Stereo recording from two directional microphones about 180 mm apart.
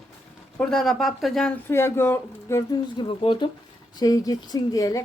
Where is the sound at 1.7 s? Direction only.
15° left (ahead or behind).